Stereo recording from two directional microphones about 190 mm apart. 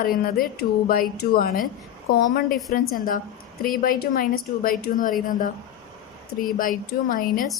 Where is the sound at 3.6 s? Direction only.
50° left (ahead or behind).